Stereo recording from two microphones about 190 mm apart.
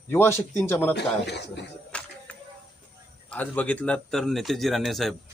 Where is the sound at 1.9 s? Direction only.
5° left (ahead or behind).